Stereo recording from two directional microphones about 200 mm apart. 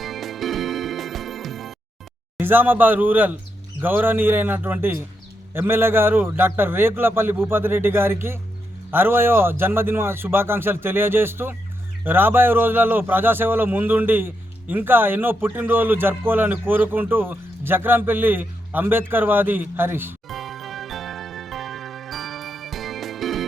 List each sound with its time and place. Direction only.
0.0 s music: centre (ahead or behind)
2.4 s a man's voice: 10° right (ahead or behind)
20.2 s jingle: centre (ahead or behind)